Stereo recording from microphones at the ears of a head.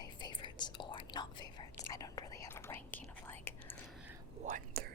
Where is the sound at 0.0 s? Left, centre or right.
Left.